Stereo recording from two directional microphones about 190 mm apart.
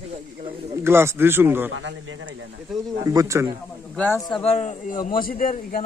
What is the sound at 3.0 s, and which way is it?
Speech, 15° right (ahead or behind).